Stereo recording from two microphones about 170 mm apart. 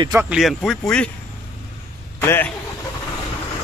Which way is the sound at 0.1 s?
5° right (ahead or behind).